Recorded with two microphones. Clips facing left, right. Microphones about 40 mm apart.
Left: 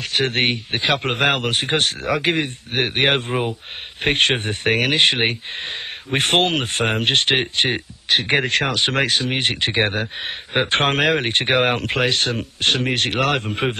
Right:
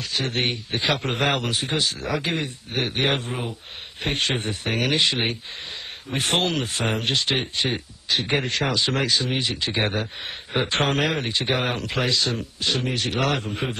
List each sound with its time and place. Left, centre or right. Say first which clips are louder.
0.0 s speech: left 5 dB; left